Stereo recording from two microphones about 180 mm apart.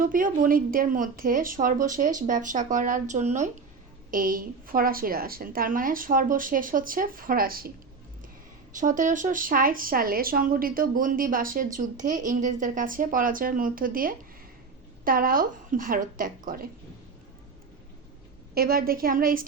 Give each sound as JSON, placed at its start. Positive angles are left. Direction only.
{"t": 0.0, "sound": "speech", "side_deg": -50}
{"t": 4.1, "sound": "speech", "side_deg": -50}
{"t": 8.7, "sound": "speech", "side_deg": -45}
{"t": 18.5, "sound": "a woman's voice", "side_deg": -55}